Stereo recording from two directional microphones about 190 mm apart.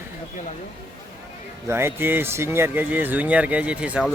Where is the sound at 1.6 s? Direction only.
10° right (ahead or behind).